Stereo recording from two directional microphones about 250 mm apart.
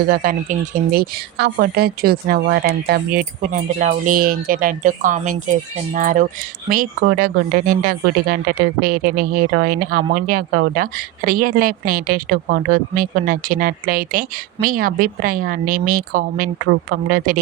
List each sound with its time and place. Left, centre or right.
0.0 s speech: right